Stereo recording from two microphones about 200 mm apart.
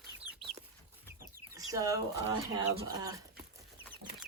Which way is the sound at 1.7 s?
15° right (ahead or behind).